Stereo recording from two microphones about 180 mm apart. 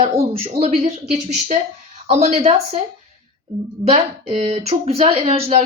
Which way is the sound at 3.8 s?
35° right (ahead or behind).